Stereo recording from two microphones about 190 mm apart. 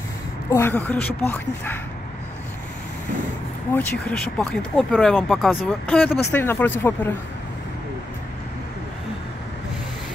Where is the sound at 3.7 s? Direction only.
5° left (ahead or behind).